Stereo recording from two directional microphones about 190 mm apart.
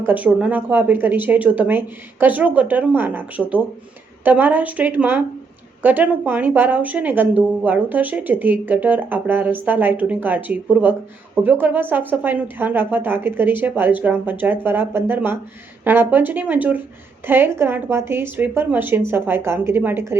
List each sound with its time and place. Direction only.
0.0 s speech: 10° right (ahead or behind)